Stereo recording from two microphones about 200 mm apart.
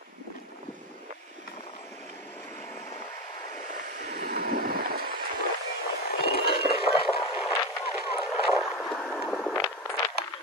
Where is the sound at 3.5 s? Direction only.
40° right (ahead or behind).